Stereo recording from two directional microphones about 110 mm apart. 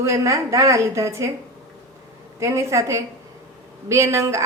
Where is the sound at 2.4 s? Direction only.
25° right (ahead or behind).